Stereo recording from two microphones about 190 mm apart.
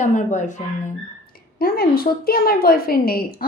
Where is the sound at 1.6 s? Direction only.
50° left (ahead or behind).